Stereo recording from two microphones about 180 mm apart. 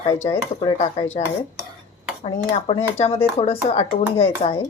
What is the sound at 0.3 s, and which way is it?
Speech, 30° left (ahead or behind).